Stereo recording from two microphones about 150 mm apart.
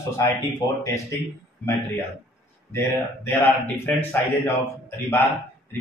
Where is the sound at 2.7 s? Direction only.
15° left (ahead or behind).